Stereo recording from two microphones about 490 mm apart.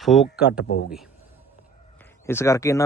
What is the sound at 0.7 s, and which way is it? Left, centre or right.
Speech, centre.